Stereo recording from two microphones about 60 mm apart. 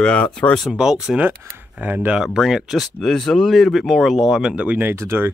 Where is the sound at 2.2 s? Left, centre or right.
Centre.